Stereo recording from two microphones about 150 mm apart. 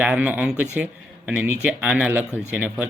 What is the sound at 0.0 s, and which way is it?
Speech, 10° right (ahead or behind).